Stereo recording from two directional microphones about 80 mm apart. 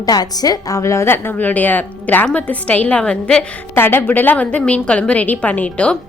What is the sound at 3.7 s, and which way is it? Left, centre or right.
A woman's voice, left.